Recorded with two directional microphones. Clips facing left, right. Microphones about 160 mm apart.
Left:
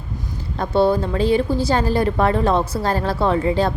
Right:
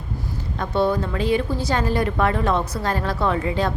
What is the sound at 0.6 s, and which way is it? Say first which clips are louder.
A woman's voice: left 4 dB; 30° left (ahead or behind).